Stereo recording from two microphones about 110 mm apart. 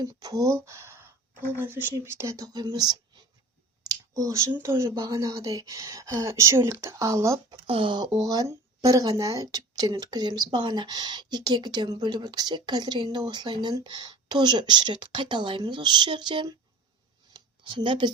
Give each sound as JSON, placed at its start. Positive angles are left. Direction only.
{"t": 0.0, "sound": "speech", "side_deg": -35}
{"t": 7.7, "sound": "a woman's voice", "side_deg": -50}
{"t": 17.3, "sound": "a sound", "side_deg": -45}